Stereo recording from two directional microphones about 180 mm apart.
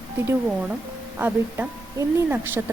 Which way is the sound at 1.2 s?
10° right (ahead or behind).